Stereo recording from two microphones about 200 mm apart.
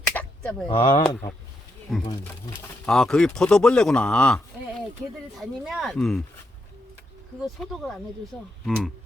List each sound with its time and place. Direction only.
0.1 s a sound: 5° left (ahead or behind)
0.7 s speech: 25° left (ahead or behind)
2.0 s speech: 10° left (ahead or behind)
7.4 s speech: centre (ahead or behind)